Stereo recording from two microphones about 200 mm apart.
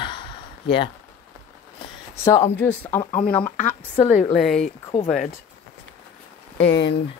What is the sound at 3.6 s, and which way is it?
Speech, 35° left (ahead or behind).